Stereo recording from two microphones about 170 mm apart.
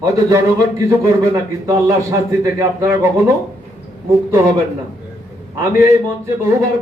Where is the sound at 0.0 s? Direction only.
20° right (ahead or behind).